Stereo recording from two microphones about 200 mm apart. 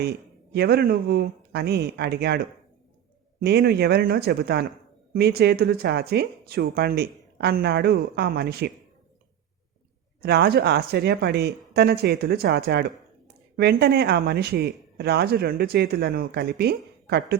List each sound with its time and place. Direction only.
0.5 s speech: 55° right (ahead or behind)
10.2 s speech: 50° right (ahead or behind)